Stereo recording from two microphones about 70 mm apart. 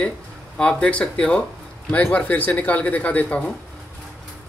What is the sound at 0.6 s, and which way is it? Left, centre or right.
Speech, centre.